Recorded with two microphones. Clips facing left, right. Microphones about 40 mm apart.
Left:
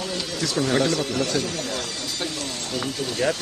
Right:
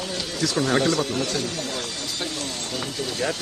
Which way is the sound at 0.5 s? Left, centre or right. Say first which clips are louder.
Even; right.